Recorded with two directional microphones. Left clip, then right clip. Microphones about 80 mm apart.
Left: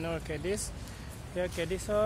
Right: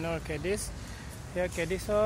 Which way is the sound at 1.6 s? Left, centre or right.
Right.